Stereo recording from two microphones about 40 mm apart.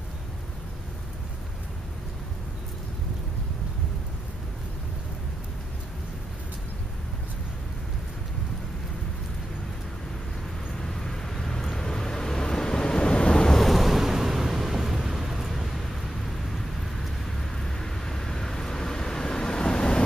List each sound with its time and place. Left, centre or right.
10.8 s vehicle: centre
13.6 s vehicle: centre
17.4 s vehicle: centre